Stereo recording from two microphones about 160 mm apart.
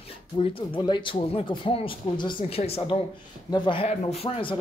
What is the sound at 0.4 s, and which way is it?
Speech, 30° left (ahead or behind).